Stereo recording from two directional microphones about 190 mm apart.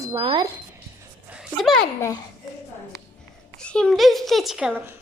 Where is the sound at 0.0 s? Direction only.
25° right (ahead or behind).